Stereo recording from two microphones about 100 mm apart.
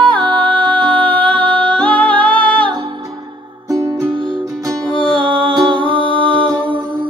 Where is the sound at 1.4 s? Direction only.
55° right (ahead or behind).